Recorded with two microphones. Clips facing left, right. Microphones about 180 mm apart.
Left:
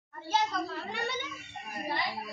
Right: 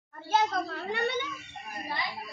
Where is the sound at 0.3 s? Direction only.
55° right (ahead or behind).